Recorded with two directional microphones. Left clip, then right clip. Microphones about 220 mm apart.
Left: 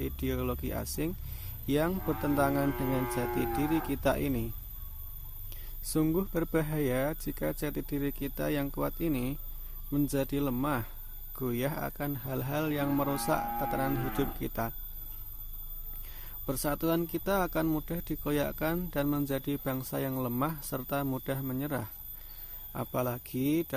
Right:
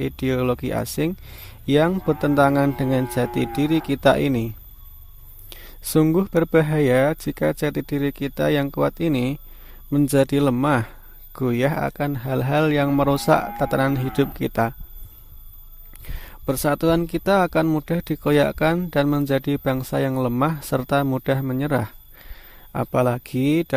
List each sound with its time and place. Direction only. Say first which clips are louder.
0.0 s speech: right 12 dB; 40° right (ahead or behind)
16.0 s speech: right 12 dB; 40° right (ahead or behind)